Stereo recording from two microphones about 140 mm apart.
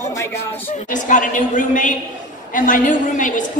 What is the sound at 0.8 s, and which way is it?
A woman's voice, 70° left (ahead or behind).